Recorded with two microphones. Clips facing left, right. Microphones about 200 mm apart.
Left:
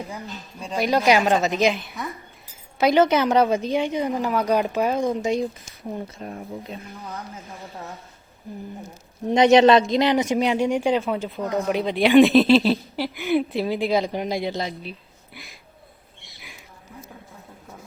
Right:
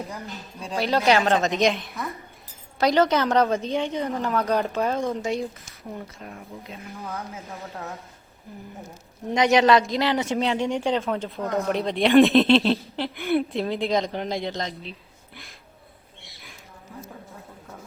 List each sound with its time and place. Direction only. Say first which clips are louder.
0.8 s speech: left 2 dB; 15° left (ahead or behind)
2.9 s speech: left 3 dB; 15° left (ahead or behind)
6.1 s speech: left 6 dB; 30° left (ahead or behind)
9.3 s speech: left 4 dB; 25° left (ahead or behind); by 14.9 s 5° left (ahead or behind)